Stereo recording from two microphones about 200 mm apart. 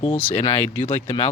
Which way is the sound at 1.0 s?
30° left (ahead or behind).